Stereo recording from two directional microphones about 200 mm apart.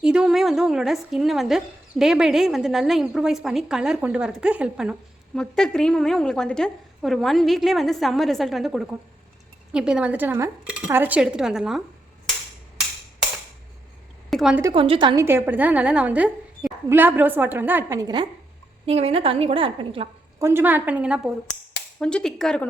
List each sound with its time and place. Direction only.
0.0 s speech: 5° right (ahead or behind)
14.3 s speech: centre (ahead or behind)
14.6 s a woman's voice: 25° right (ahead or behind)
20.4 s a woman's voice: 10° right (ahead or behind); by 22.6 s 5° left (ahead or behind)